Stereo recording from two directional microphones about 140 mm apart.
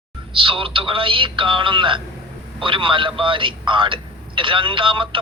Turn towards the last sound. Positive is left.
turn(degrees=-35)  # may be behind; listen again after turning